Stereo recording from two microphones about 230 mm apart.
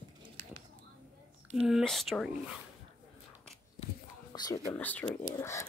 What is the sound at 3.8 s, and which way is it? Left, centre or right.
Whispering, left.